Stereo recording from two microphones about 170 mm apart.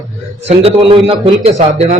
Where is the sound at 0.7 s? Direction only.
30° right (ahead or behind).